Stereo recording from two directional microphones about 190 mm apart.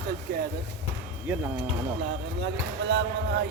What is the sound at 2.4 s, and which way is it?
Speech, 65° right (ahead or behind).